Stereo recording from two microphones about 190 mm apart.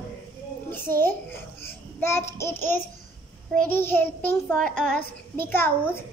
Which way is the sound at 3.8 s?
10° left (ahead or behind).